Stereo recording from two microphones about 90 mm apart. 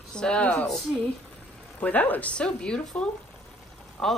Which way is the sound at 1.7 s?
20° left (ahead or behind).